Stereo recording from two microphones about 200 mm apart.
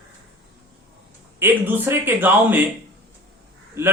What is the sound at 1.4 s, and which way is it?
Speech, 10° right (ahead or behind).